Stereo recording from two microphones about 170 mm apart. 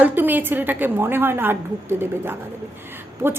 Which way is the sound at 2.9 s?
15° right (ahead or behind).